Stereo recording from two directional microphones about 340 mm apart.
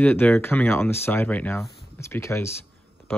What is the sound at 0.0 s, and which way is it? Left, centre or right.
Speech, centre.